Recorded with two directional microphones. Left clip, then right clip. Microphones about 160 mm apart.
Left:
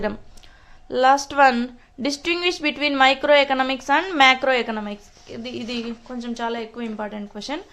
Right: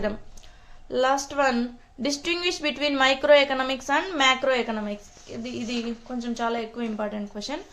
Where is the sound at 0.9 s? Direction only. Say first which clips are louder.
Left 6 dB; 25° left (ahead or behind).